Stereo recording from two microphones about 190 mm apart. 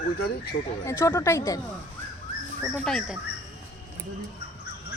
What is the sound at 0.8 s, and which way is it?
Speech, 15° left (ahead or behind).